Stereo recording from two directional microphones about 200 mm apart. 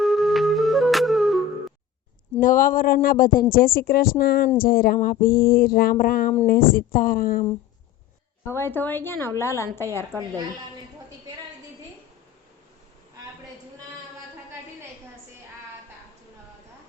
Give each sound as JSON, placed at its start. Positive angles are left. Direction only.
{"t": 0.0, "sound": "music", "side_deg": 0}
{"t": 2.4, "sound": "speech", "side_deg": 45}
{"t": 8.4, "sound": "a woman's voice", "side_deg": 10}